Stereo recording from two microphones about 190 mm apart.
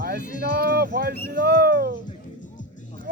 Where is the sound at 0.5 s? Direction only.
55° right (ahead or behind).